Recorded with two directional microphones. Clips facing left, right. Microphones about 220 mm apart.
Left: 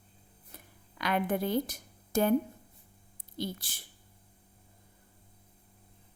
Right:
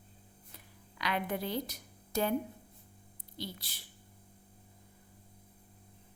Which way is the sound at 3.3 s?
50° left (ahead or behind).